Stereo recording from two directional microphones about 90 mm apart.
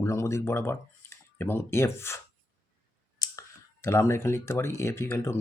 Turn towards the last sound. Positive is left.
turn(degrees=25)  # may be behind; listen again after turning